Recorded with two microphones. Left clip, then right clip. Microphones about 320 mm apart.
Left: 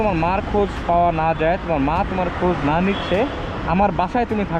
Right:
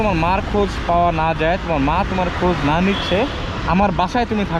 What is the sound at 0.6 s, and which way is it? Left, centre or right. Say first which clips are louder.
Speech: even; left.